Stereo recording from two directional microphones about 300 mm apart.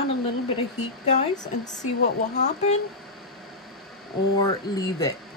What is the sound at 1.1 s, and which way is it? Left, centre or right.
Speech, left.